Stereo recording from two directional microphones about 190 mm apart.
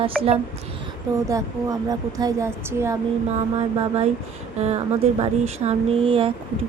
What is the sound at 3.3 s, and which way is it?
Speech, 30° right (ahead or behind).